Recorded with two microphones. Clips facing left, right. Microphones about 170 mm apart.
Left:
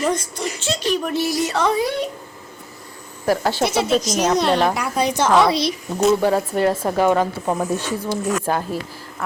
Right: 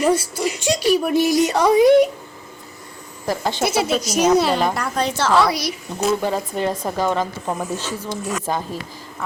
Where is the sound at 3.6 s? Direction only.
5° right (ahead or behind).